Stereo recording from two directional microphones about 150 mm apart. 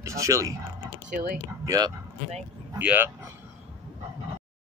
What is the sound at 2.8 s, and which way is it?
Speech, 10° right (ahead or behind).